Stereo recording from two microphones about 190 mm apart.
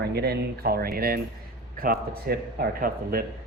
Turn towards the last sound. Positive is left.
turn(degrees=-50)  # may be behind; listen again after turning